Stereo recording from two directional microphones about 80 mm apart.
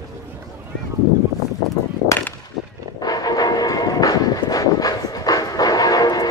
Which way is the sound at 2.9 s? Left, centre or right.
Left.